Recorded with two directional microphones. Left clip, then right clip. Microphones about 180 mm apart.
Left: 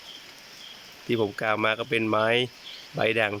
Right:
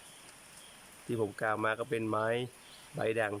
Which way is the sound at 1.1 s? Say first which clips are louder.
Left 7 dB; centre (ahead or behind).